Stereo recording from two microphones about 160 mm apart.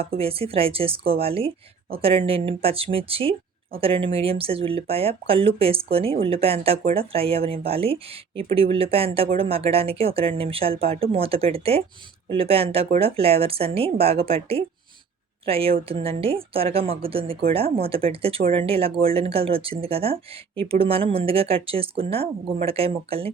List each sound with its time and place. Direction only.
0.2 s speech: 35° right (ahead or behind)